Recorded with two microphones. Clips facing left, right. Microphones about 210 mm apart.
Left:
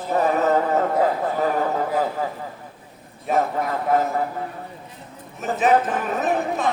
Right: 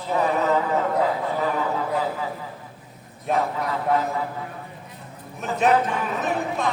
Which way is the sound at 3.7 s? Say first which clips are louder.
Left 2 dB; 45° left (ahead or behind).